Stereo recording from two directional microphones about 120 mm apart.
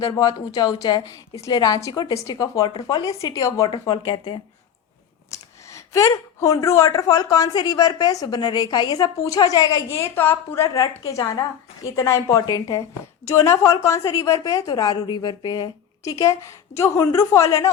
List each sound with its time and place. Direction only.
0.0 s a woman's voice: 30° left (ahead or behind)
5.3 s a woman's voice: 25° left (ahead or behind)